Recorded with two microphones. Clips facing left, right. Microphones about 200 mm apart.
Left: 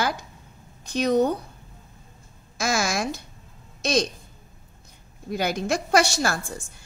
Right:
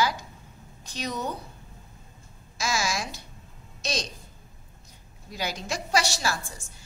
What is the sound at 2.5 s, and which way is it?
Speech, 55° left (ahead or behind).